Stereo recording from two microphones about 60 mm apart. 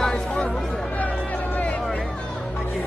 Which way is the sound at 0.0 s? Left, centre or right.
Centre.